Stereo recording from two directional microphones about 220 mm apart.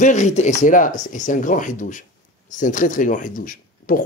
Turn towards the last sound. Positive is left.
turn(degrees=40)  # may be behind; listen again after turning